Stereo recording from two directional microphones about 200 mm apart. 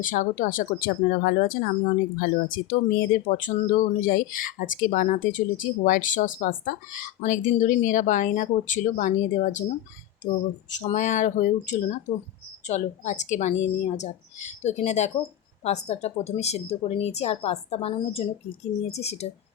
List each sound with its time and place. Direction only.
0.0 s speech: 40° left (ahead or behind)